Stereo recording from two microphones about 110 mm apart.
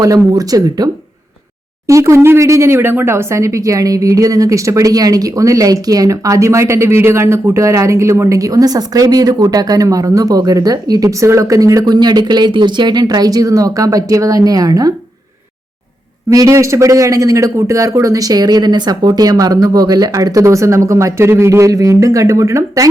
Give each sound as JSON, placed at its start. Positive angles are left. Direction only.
{"t": 0.0, "sound": "speech", "side_deg": -35}
{"t": 1.9, "sound": "speech", "side_deg": -25}
{"t": 16.3, "sound": "a man's voice", "side_deg": -30}